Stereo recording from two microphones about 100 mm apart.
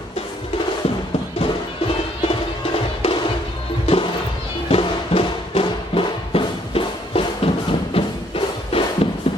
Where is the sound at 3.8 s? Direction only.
75° left (ahead or behind).